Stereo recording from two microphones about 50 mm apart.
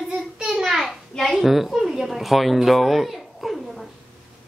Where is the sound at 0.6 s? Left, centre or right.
Centre.